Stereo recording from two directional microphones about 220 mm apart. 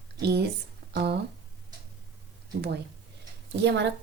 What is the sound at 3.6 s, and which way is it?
Speech, 50° right (ahead or behind).